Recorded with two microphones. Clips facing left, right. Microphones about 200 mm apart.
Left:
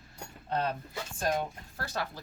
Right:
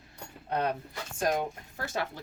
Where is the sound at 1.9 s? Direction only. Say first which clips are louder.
Right 2 dB; 20° right (ahead or behind).